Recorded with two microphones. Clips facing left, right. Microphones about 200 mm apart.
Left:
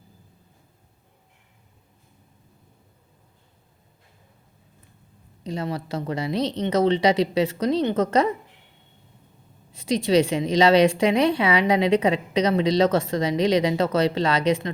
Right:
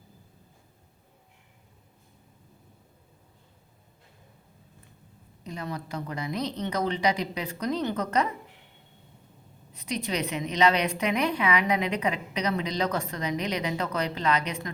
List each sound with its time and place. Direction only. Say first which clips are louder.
5.5 s speech: left 7 dB; 25° left (ahead or behind)
9.7 s speech: left 11 dB; 25° left (ahead or behind)